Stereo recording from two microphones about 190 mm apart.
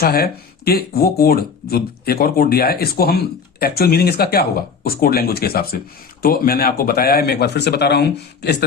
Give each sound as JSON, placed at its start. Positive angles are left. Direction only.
{"t": 0.0, "sound": "speech", "side_deg": 55}